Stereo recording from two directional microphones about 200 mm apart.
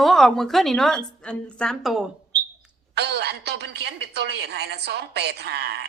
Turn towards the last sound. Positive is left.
turn(degrees=-55)  # may be behind; listen again after turning